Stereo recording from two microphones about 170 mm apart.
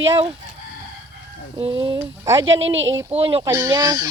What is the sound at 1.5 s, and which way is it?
Speech, 30° right (ahead or behind).